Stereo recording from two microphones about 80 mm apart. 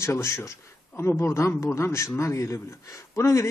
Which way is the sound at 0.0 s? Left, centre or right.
Left.